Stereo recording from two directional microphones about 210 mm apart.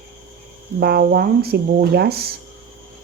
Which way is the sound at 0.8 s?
50° right (ahead or behind).